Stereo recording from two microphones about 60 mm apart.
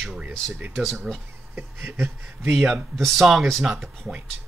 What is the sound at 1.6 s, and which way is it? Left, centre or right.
Speech, right.